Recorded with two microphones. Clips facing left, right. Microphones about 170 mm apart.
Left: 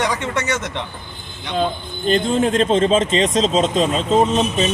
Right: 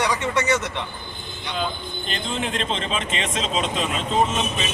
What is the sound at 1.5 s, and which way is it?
Speech, 40° left (ahead or behind).